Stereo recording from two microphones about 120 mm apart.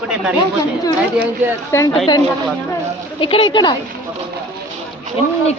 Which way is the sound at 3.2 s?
45° left (ahead or behind).